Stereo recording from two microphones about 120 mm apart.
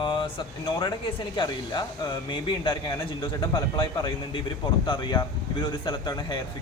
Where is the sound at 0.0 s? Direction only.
45° left (ahead or behind).